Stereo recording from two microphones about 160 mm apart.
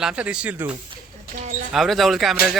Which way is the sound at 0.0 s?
5° right (ahead or behind).